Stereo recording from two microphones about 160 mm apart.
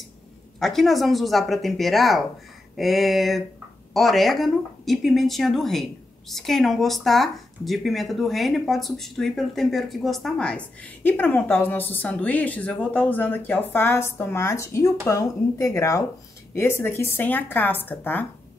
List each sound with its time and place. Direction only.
0.6 s speech: centre (ahead or behind)